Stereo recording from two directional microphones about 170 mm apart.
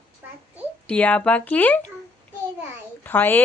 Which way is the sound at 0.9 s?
5° left (ahead or behind).